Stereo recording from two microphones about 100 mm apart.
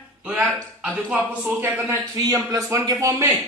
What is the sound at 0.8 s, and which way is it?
Speech, 15° right (ahead or behind).